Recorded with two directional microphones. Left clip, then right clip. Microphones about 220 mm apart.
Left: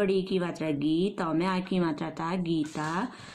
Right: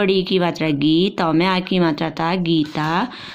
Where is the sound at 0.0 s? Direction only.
35° right (ahead or behind).